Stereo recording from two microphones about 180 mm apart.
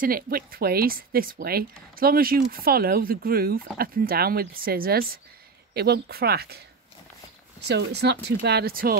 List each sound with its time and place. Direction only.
0.0 s a woman's voice: 55° right (ahead or behind)
7.6 s a woman's voice: 70° right (ahead or behind)